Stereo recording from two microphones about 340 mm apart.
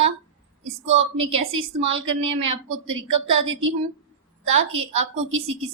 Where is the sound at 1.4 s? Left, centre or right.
Right.